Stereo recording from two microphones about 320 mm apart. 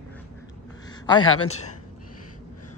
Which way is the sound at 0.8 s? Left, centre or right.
Centre.